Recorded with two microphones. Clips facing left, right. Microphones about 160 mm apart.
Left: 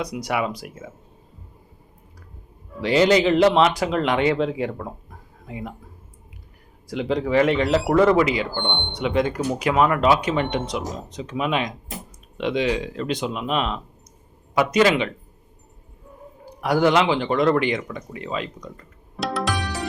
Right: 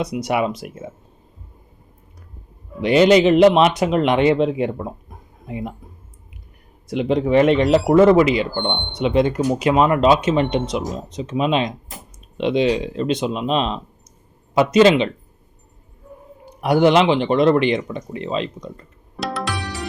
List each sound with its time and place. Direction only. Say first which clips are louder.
0.0 s speech: right 4 dB; 25° right (ahead or behind)
2.8 s speech: right 4 dB; 20° right (ahead or behind)
6.8 s speech: right 4 dB; 20° right (ahead or behind)
16.5 s speech: right 4 dB; 20° right (ahead or behind)
19.1 s music: even; centre (ahead or behind)